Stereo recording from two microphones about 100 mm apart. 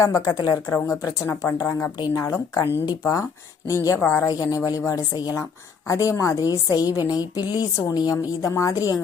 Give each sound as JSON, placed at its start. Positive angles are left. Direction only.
{"t": 0.0, "sound": "speech", "side_deg": 35}